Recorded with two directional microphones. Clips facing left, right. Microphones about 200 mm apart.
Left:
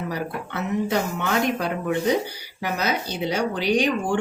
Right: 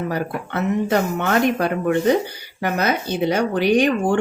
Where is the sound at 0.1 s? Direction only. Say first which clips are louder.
Right 4 dB; 55° right (ahead or behind).